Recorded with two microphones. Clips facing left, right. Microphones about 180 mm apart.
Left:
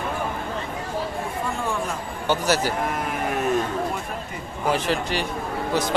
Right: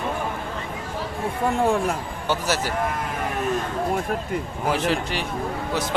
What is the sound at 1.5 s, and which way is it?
Speech, 65° right (ahead or behind).